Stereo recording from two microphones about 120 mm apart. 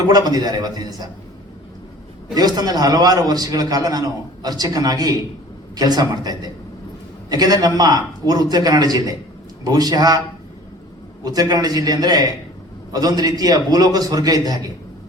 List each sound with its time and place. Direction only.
0.1 s a man's voice: 35° right (ahead or behind)
2.3 s a man's voice: 35° right (ahead or behind)
11.2 s a man's voice: 30° right (ahead or behind)